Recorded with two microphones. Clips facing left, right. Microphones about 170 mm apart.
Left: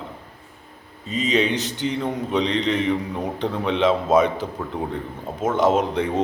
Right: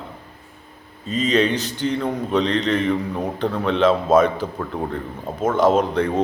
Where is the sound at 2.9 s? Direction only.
Centre (ahead or behind).